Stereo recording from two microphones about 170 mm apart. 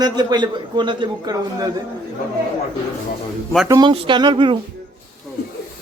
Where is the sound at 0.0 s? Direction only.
25° right (ahead or behind).